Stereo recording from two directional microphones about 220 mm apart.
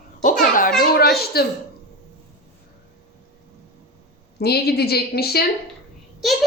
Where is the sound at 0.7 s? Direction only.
45° left (ahead or behind).